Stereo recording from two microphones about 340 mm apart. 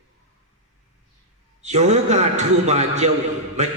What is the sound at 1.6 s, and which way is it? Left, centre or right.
A man's voice, centre.